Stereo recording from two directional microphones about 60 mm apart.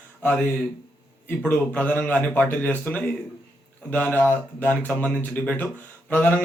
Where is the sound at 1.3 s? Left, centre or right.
Left.